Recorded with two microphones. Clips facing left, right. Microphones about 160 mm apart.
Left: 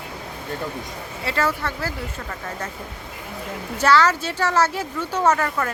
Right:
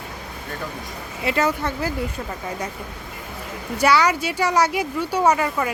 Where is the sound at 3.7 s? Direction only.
10° right (ahead or behind).